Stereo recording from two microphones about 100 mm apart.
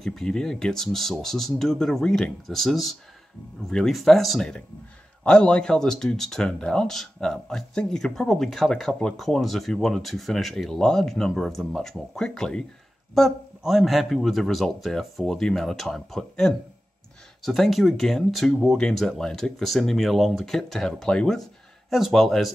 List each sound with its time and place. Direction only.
0.0 s speech: 5° left (ahead or behind)